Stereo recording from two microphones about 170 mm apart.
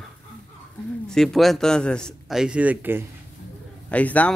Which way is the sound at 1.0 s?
Centre (ahead or behind).